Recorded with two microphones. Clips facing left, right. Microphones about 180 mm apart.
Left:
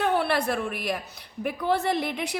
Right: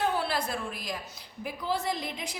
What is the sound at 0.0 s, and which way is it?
A woman's voice, 65° left (ahead or behind).